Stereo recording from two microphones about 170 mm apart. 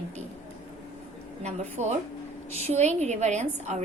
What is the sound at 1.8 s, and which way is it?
A woman's voice, 40° right (ahead or behind).